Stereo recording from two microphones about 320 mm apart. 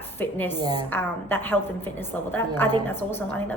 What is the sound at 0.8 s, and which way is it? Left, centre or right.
A woman's voice, centre.